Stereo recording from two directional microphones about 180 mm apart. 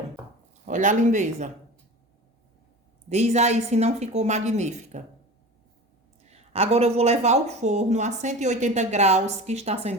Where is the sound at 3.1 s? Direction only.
40° right (ahead or behind).